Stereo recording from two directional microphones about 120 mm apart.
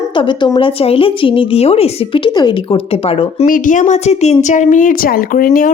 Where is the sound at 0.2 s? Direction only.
40° left (ahead or behind).